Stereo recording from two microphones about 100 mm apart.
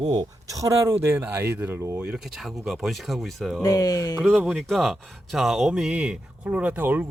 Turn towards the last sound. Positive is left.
turn(degrees=-20)  # may be behind; listen again after turning